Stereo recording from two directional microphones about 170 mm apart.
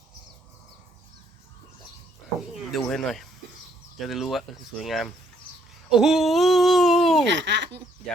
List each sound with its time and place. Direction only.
2.9 s speech: centre (ahead or behind)
7.3 s speech: 90° right